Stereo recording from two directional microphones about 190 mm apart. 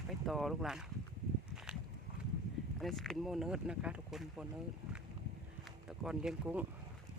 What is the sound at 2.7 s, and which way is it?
Speech, centre (ahead or behind).